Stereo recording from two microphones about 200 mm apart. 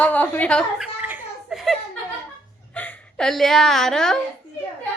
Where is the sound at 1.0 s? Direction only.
5° right (ahead or behind).